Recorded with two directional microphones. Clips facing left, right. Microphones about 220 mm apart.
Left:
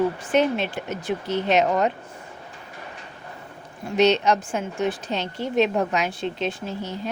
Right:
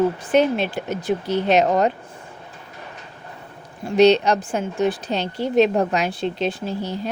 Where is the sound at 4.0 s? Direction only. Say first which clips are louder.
Right 4 dB; 35° right (ahead or behind).